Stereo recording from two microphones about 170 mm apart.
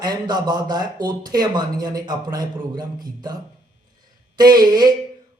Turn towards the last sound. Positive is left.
turn(degrees=-25)  # may be behind; listen again after turning